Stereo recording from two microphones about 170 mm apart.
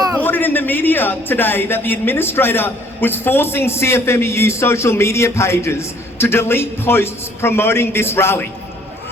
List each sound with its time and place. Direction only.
0.2 s a man's voice: 10° left (ahead or behind)